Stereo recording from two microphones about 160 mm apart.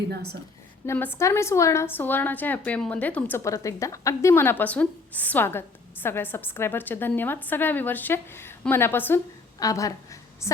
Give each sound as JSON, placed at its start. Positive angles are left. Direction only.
{"t": 0.9, "sound": "a woman's voice", "side_deg": 10}